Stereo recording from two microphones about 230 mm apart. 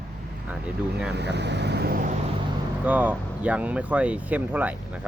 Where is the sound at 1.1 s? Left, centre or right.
Right.